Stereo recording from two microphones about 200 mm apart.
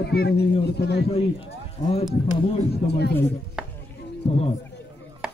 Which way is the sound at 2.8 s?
55° left (ahead or behind).